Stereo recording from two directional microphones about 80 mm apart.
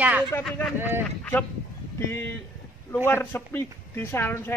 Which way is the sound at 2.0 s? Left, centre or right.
Left.